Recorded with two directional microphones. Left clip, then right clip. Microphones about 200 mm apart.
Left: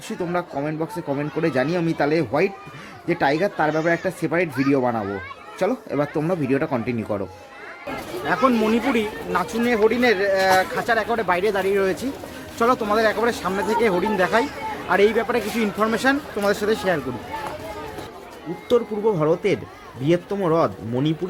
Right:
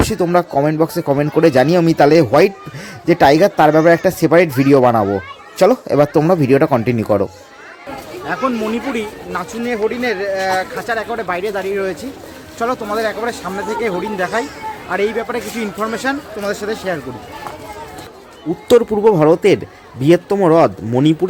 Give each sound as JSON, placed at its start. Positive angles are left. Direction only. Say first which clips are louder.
{"t": 0.0, "sound": "speech", "louder": "right 11 dB", "side_deg": -40}
{"t": 8.3, "sound": "speech", "louder": "even", "side_deg": 5}
{"t": 18.7, "sound": "speech", "louder": "right 9 dB", "side_deg": -35}